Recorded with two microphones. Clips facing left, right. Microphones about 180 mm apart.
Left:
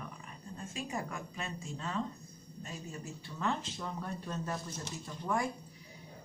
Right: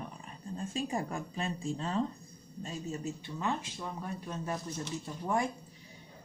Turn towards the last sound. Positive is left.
turn(degrees=-25)  # may be behind; listen again after turning